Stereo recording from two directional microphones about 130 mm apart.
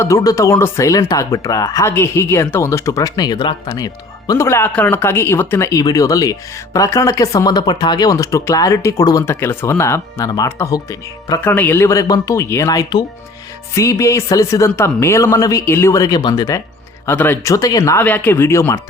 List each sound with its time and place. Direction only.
0.0 s speech: 25° left (ahead or behind)
11.4 s speech: 15° left (ahead or behind); by 16.6 s 30° left (ahead or behind)
17.1 s speech: 15° left (ahead or behind)
17.5 s speech: 25° left (ahead or behind)
18.0 s speech: 15° left (ahead or behind)